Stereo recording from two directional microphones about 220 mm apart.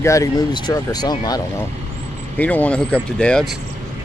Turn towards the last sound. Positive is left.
turn(degrees=5)  # may be behind; listen again after turning